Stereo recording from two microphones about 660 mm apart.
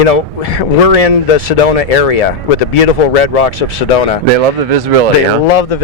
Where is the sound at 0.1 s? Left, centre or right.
Left.